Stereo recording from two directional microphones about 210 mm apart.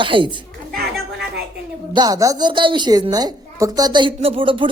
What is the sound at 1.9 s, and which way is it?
A woman's voice, 15° right (ahead or behind).